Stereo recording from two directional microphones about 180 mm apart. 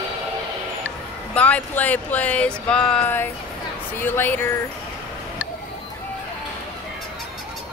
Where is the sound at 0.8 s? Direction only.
10° left (ahead or behind).